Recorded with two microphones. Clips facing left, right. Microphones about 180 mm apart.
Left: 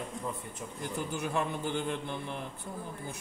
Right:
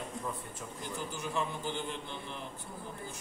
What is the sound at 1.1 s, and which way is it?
A man's voice, 60° left (ahead or behind).